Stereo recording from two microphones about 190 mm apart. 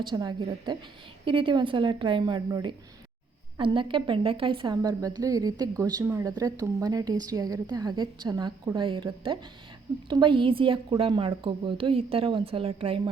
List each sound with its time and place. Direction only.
0.0 s a woman's voice: 25° right (ahead or behind)